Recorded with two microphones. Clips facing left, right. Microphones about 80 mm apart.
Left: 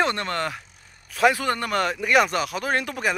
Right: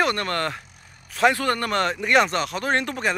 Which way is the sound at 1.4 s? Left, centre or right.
Centre.